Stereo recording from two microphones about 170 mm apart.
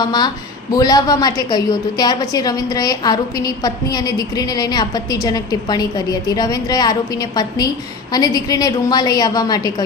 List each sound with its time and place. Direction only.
0.0 s a woman's voice: 25° left (ahead or behind)
8.1 s a woman's voice: 25° left (ahead or behind)